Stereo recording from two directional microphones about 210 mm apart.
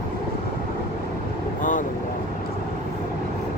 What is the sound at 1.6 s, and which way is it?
Vehicle, 40° left (ahead or behind).